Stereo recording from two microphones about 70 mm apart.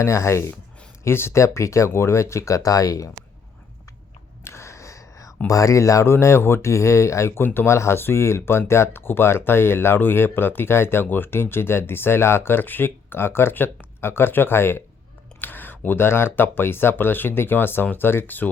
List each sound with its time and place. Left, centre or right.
0.0 s speech: left
4.4 s gasp: left
5.5 s speech: left